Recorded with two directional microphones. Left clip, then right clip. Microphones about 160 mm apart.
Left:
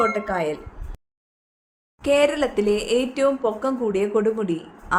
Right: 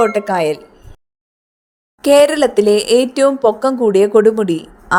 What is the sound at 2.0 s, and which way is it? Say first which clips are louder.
A woman's voice: right 9 dB; 60° right (ahead or behind).